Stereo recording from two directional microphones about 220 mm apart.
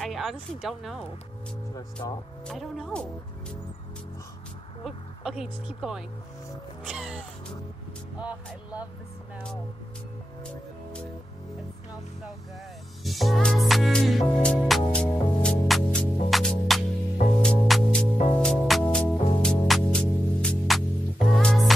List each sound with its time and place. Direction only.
0.0 s speech: centre (ahead or behind)
1.8 s speech: 15° left (ahead or behind)
2.4 s speech: centre (ahead or behind)
4.8 s speech: centre (ahead or behind)
13.0 s music: centre (ahead or behind)